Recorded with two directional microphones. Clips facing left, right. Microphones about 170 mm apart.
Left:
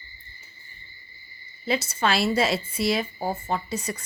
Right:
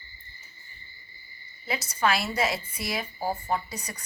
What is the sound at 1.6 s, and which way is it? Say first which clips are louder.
A woman's voice: left 2 dB; 25° left (ahead or behind).